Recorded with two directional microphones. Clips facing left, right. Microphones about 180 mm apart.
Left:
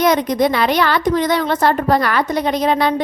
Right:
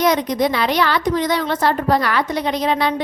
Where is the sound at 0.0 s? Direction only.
50° left (ahead or behind).